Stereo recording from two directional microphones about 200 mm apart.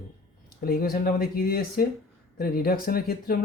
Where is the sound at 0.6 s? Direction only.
50° left (ahead or behind).